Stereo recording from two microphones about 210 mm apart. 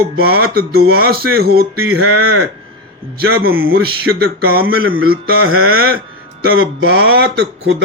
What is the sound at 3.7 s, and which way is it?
Speech, 45° right (ahead or behind).